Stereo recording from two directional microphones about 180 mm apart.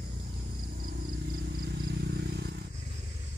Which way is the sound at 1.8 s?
70° right (ahead or behind).